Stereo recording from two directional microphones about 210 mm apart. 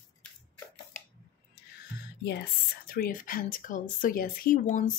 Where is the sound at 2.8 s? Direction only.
45° left (ahead or behind).